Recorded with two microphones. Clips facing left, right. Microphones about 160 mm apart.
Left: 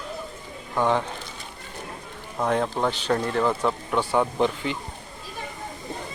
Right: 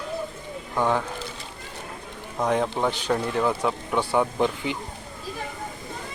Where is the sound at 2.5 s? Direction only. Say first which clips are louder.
Even; 10° right (ahead or behind).